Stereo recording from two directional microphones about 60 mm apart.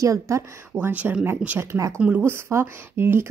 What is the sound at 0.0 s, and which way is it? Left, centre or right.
Speech, right.